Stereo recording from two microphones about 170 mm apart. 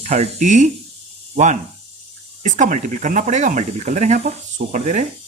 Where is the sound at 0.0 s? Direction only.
40° right (ahead or behind).